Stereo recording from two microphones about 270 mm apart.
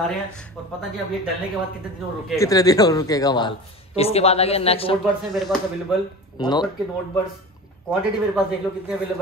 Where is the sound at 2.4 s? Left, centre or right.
Centre.